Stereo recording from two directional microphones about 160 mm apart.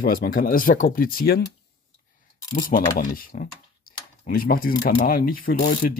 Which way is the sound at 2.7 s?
60° left (ahead or behind).